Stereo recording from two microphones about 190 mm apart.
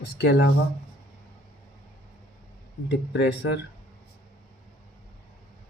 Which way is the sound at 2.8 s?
65° left (ahead or behind).